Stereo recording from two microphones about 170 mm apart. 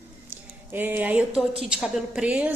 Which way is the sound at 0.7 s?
10° right (ahead or behind).